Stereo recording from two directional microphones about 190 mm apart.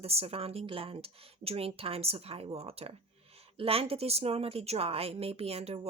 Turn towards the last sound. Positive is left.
turn(degrees=-30)  # may be behind; listen again after turning